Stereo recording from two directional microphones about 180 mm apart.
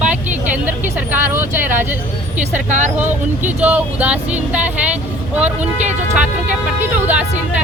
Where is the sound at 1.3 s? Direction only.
10° right (ahead or behind).